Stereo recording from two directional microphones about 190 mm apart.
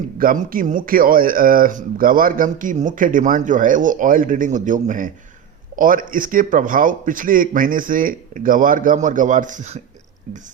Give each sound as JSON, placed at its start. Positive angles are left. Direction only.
{"t": 0.2, "sound": "speech", "side_deg": -50}